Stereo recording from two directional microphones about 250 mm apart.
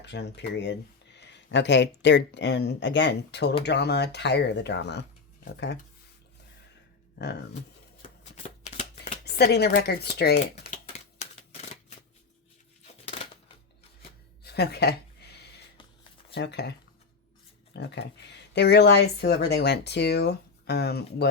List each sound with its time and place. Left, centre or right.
0.0 s speech: left
7.2 s speech: left
8.2 s shuffling cards: left
9.2 s speech: left
10.4 s shuffling cards: left
14.4 s a sound: left
16.3 s speech: left
17.7 s speech: left